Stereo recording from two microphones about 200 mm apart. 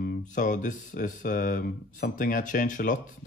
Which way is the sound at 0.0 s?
40° left (ahead or behind).